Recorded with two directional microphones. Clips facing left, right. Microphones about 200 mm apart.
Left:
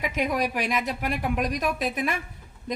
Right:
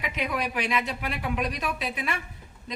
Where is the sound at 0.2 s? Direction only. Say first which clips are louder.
Left 3 dB; 45° left (ahead or behind).